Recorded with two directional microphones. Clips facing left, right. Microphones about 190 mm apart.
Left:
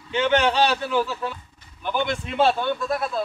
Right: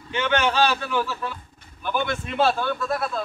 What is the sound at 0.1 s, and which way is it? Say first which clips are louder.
A man's voice: left 3 dB; 20° left (ahead or behind).